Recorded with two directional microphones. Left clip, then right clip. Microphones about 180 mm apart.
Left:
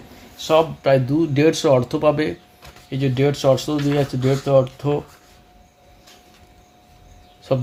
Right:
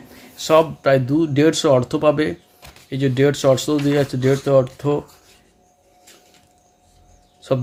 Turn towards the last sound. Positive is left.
turn(degrees=-20)  # may be behind; listen again after turning